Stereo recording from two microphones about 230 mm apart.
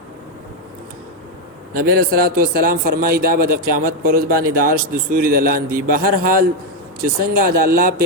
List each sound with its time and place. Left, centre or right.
1.7 s a man's voice: right